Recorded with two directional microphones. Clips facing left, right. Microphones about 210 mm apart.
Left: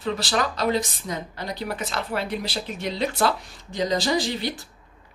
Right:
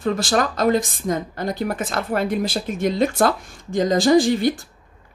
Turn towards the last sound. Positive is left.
turn(degrees=-50)  # may be behind; listen again after turning